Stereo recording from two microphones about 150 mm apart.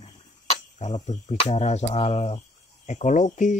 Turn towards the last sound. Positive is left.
turn(degrees=55)  # may be behind; listen again after turning